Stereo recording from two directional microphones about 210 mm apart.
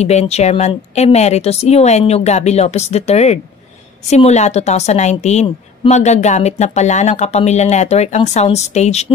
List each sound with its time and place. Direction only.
0.0 s a woman's voice: 30° left (ahead or behind)